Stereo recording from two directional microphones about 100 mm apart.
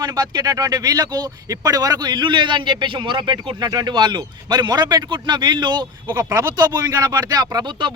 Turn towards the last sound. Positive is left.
turn(degrees=-45)  # may be behind; listen again after turning